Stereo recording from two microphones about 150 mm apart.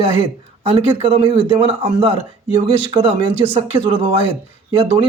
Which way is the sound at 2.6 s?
30° right (ahead or behind).